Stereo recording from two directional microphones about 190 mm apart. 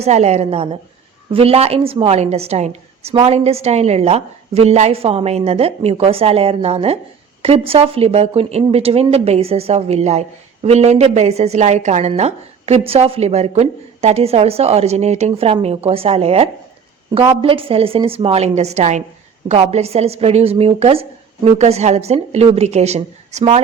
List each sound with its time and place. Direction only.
0.0 s a woman's voice: 35° right (ahead or behind)